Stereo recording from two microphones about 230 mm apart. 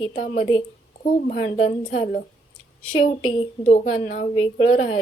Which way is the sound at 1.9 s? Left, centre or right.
Left.